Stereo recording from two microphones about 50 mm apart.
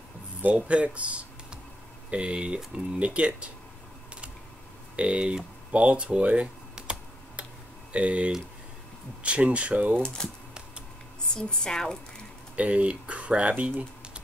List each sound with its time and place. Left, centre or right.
0.4 s speech: right
4.9 s a sound: right
7.9 s speech: right
10.0 s a woman's voice: centre
11.3 s a woman's voice: centre
12.5 s speech: right